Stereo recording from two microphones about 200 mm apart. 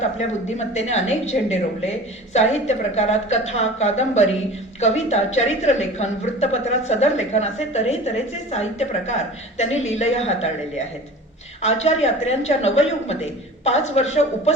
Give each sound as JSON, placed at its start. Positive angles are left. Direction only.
{"t": 0.5, "sound": "a woman's voice", "side_deg": 35}
{"t": 9.7, "sound": "a woman's voice", "side_deg": 80}
{"t": 10.0, "sound": "a woman's voice", "side_deg": 30}
{"t": 11.6, "sound": "a woman's voice", "side_deg": 35}